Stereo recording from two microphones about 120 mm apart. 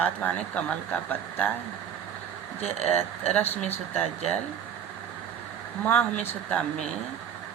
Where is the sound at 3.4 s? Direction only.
15° left (ahead or behind).